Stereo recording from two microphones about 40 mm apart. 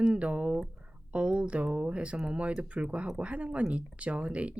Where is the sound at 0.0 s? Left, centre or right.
Right.